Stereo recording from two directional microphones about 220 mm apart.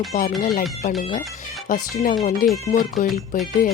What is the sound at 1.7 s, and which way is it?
Speech, 40° left (ahead or behind).